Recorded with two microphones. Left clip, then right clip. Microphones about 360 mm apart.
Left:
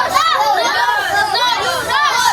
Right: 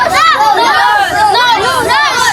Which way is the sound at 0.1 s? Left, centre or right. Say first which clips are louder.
Right 6 dB; centre.